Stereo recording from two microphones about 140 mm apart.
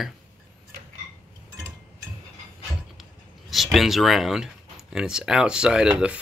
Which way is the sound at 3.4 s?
Centre (ahead or behind).